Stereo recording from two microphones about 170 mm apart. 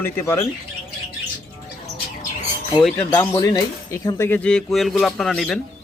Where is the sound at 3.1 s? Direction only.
20° left (ahead or behind).